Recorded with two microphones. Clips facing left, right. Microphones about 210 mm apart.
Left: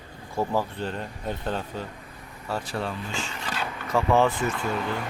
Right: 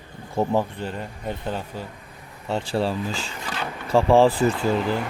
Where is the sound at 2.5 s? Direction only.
30° right (ahead or behind).